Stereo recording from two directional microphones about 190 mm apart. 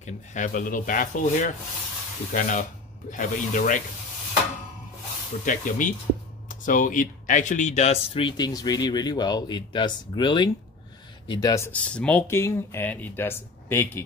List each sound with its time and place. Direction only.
0.0 s speech: 40° left (ahead or behind)
5.4 s speech: 45° left (ahead or behind); by 14.0 s 10° left (ahead or behind)